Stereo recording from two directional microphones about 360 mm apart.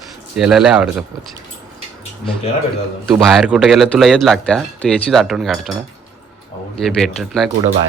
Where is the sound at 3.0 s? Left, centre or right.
Centre.